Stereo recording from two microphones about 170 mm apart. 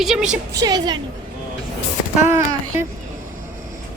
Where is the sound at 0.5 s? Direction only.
25° right (ahead or behind).